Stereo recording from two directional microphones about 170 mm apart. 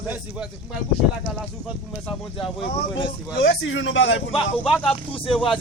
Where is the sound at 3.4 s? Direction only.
90° left.